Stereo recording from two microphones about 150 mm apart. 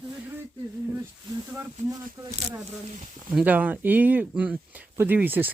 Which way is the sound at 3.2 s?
10° right (ahead or behind).